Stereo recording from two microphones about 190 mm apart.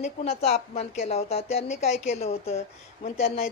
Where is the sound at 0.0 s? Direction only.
35° left (ahead or behind).